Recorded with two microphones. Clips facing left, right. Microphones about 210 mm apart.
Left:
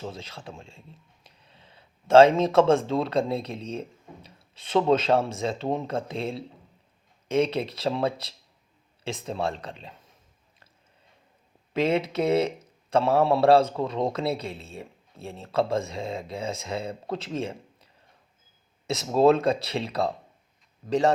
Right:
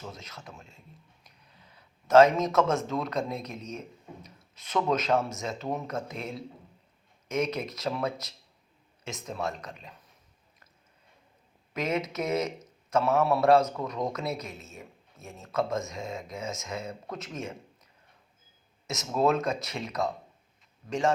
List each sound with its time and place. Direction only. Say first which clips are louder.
0.0 s a man's voice: left 6 dB; 30° left (ahead or behind)
11.7 s a man's voice: left 6 dB; 30° left (ahead or behind)
18.9 s a man's voice: left 6 dB; 30° left (ahead or behind)